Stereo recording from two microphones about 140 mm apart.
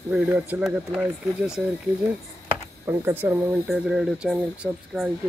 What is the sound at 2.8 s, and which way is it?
Speech, 15° right (ahead or behind).